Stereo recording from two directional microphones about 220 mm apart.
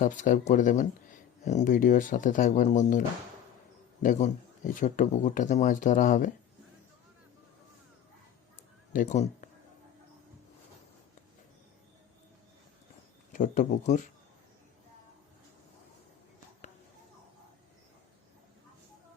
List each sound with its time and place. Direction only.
0.0 s speech: 35° left (ahead or behind)
4.0 s speech: 35° left (ahead or behind)
8.9 s speech: 35° left (ahead or behind)
13.3 s speech: 35° left (ahead or behind)